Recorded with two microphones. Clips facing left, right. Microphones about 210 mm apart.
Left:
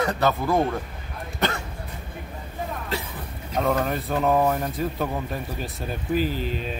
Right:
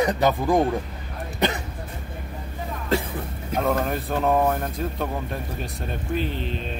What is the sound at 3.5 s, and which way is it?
Speech, centre (ahead or behind).